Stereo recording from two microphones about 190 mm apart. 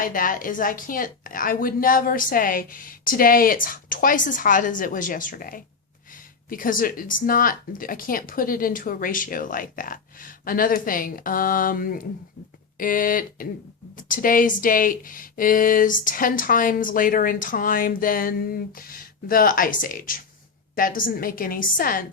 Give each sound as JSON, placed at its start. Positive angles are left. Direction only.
{"t": 0.0, "sound": "speech", "side_deg": 45}